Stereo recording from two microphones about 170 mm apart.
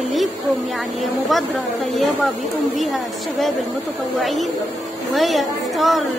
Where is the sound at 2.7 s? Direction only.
Centre (ahead or behind).